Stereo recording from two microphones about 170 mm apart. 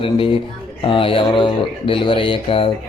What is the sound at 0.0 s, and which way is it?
Speech, 30° left (ahead or behind).